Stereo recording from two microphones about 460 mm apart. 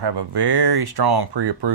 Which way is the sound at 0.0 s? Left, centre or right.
Right.